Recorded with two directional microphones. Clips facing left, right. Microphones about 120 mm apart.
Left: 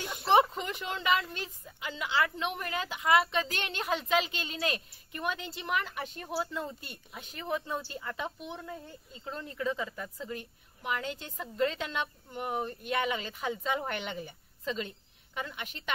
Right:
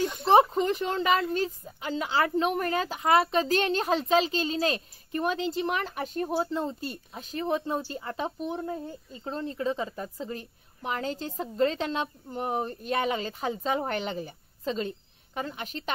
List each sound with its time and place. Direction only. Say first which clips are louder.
0.3 s a woman's voice: right 4 dB; 35° right (ahead or behind)